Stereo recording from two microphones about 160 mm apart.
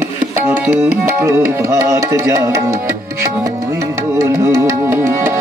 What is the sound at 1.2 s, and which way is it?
Music, 15° right (ahead or behind).